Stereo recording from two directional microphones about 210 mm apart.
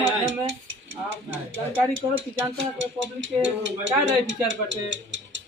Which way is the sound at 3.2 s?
65° right (ahead or behind).